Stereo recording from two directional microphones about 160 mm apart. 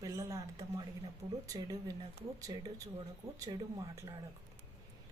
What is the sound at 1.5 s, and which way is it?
Speech, 25° right (ahead or behind).